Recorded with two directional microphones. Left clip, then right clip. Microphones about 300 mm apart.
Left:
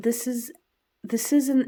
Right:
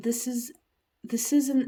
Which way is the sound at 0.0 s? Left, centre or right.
Centre.